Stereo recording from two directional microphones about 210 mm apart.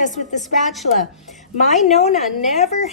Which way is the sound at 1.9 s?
30° left (ahead or behind).